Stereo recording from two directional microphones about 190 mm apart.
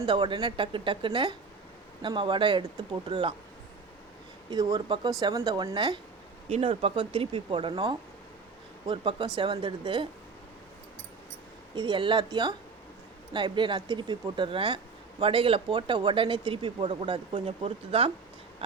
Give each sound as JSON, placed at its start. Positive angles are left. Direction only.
{"t": 0.0, "sound": "speech", "side_deg": -25}
{"t": 4.5, "sound": "speech", "side_deg": -20}
{"t": 11.7, "sound": "speech", "side_deg": -25}